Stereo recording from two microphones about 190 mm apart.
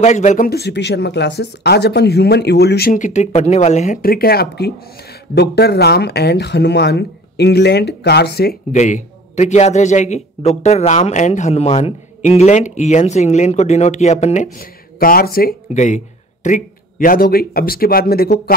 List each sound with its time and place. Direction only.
0.0 s a man's voice: 40° left (ahead or behind)
0.5 s speech: 60° left (ahead or behind)
8.7 s a man's voice: 40° left (ahead or behind); by 18.5 s 55° left (ahead or behind)